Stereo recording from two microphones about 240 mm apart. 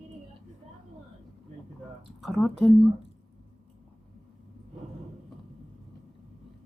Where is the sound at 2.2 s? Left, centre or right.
Centre.